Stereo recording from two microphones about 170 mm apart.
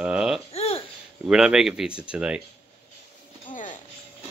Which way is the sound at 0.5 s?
35° left (ahead or behind).